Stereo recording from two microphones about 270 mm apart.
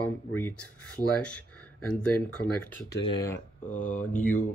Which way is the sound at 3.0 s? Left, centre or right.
Centre.